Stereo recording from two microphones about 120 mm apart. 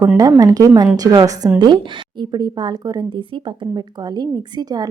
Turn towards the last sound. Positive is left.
turn(degrees=-35)  # may be behind; listen again after turning